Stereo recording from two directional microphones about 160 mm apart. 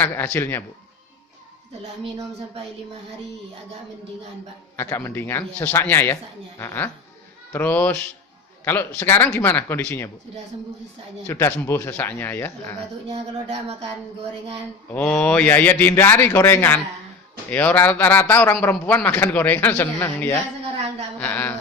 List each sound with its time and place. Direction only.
0.0 s a man's voice: 10° left (ahead or behind)
4.8 s a man's voice: 15° left (ahead or behind)
11.3 s a man's voice: 15° left (ahead or behind)
13.1 s speech: 40° right (ahead or behind)
14.8 s a man's voice: 10° left (ahead or behind)
21.2 s a sound: 10° left (ahead or behind)